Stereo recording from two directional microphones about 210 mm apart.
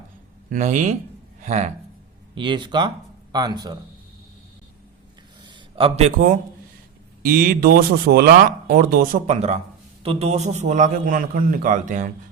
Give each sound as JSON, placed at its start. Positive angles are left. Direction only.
{"t": 0.5, "sound": "a man's voice", "side_deg": -35}
{"t": 5.7, "sound": "a man's voice", "side_deg": -30}
{"t": 7.2, "sound": "speech", "side_deg": -45}
{"t": 9.2, "sound": "a man's voice", "side_deg": -30}